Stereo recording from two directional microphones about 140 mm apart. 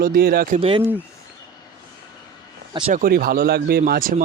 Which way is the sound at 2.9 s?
90° right.